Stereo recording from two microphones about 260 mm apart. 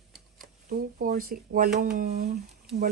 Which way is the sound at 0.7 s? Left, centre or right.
Right.